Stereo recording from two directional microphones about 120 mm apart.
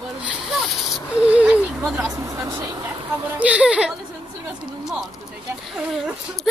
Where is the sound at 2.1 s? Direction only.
25° right (ahead or behind).